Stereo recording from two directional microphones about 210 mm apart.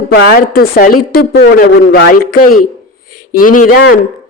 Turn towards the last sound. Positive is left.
turn(degrees=45)  # may be behind; listen again after turning